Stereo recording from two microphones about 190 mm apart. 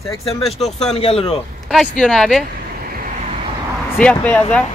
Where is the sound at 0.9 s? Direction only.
30° left (ahead or behind).